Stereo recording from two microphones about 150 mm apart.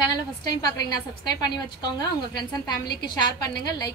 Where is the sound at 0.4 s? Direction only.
25° left (ahead or behind).